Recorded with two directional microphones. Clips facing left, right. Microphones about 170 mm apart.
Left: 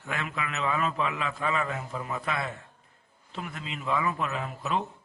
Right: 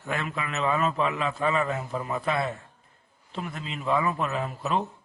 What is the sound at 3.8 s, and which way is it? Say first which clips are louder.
Speech: right 3 dB; 35° right (ahead or behind).